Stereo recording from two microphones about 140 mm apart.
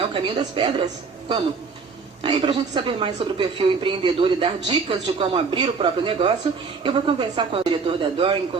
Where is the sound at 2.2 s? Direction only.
35° right (ahead or behind).